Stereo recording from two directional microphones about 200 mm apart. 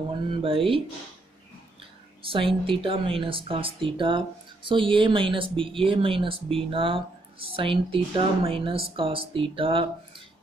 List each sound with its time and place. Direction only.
0.3 s speech: 25° right (ahead or behind)
2.2 s speech: 25° right (ahead or behind)